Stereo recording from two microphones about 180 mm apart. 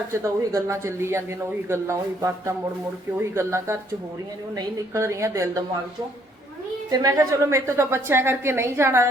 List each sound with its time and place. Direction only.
0.1 s a woman's voice: 15° right (ahead or behind)
6.9 s a woman's voice: 20° right (ahead or behind)